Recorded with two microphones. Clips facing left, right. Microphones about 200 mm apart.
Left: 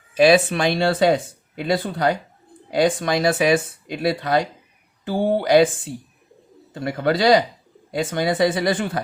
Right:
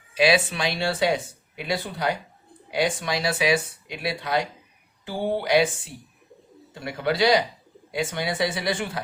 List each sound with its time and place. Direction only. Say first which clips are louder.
0.1 s speech: left 6 dB; 50° left (ahead or behind)
6.7 s speech: left 4 dB; 50° left (ahead or behind)